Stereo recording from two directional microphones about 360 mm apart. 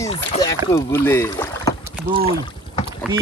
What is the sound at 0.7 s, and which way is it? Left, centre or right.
Speech, centre.